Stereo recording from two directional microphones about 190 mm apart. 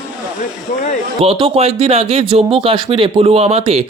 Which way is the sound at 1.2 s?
30° right (ahead or behind).